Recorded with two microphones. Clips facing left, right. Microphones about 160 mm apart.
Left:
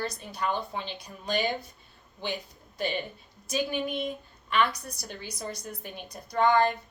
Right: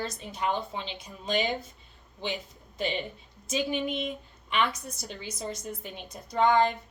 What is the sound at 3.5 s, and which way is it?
A woman's voice, 20° right (ahead or behind).